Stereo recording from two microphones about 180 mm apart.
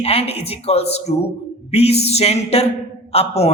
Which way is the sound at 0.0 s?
35° left (ahead or behind).